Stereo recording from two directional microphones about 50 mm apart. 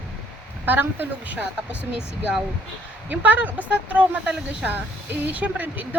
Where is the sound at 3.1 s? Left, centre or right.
Right.